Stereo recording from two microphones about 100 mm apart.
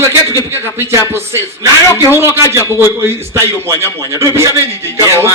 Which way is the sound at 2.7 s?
25° right (ahead or behind).